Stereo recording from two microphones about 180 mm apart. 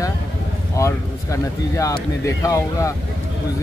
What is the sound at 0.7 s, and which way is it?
Speech, 15° left (ahead or behind).